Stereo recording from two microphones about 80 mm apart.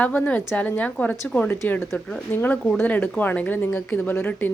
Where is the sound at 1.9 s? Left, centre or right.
Centre.